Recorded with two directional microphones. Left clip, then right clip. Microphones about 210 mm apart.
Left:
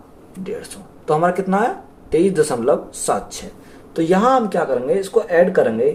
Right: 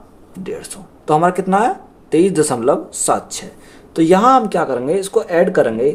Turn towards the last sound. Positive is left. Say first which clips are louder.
# right 1 dB
turn(degrees=-50)  # may be behind; listen again after turning